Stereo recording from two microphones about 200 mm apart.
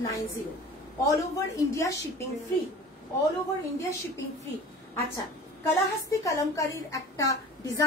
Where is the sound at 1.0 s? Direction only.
15° left (ahead or behind).